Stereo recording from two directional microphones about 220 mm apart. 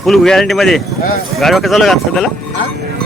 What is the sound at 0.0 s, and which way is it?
Speech, centre (ahead or behind).